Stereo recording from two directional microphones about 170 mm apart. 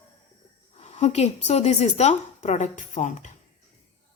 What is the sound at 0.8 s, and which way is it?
A woman's voice, 40° left (ahead or behind).